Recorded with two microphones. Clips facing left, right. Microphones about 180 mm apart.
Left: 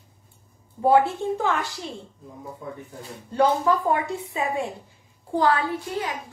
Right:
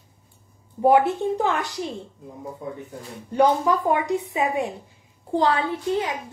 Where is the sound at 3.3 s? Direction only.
15° right (ahead or behind).